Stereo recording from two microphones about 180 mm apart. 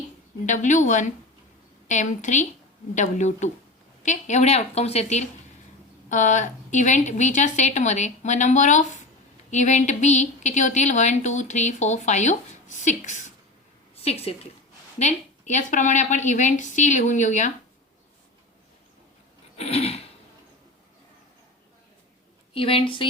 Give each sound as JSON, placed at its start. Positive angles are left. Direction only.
{"t": 0.4, "sound": "a woman's voice", "side_deg": 45}
{"t": 19.5, "sound": "a woman's voice", "side_deg": 35}
{"t": 22.5, "sound": "a woman's voice", "side_deg": 30}